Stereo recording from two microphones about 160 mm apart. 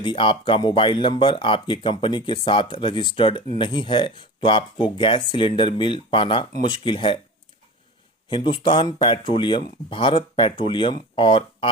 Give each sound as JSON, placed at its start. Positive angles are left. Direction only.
{"t": 0.0, "sound": "speech", "side_deg": 30}
{"t": 8.3, "sound": "speech", "side_deg": 30}